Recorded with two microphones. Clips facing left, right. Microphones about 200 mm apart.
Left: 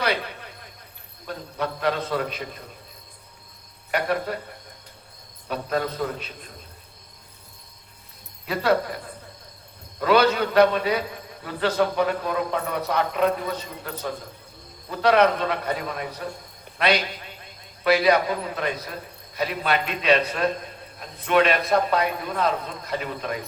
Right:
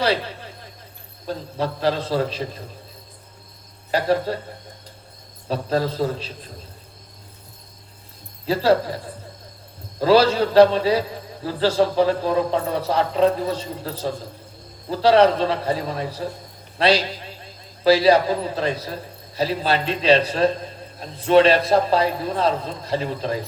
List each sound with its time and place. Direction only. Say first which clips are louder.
0.0 s a sound: right 4 dB; 30° right (ahead or behind)
1.3 s a man's voice: right 4 dB; 30° right (ahead or behind)
3.9 s a man's voice: right 5 dB; 30° right (ahead or behind)
5.5 s a man's voice: right 4 dB; 30° right (ahead or behind)
8.4 s a man's voice: right 4 dB; 30° right (ahead or behind)